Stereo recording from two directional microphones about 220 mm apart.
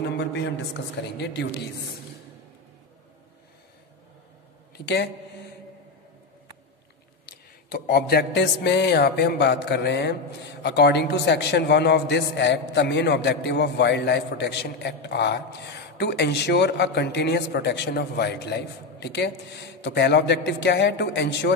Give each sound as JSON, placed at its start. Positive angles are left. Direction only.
{"t": 0.0, "sound": "a man's voice", "side_deg": 50}
{"t": 4.8, "sound": "a man's voice", "side_deg": 50}
{"t": 7.7, "sound": "a man's voice", "side_deg": 45}